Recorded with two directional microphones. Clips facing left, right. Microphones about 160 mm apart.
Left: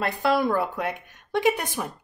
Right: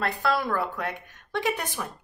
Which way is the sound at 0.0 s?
15° left (ahead or behind).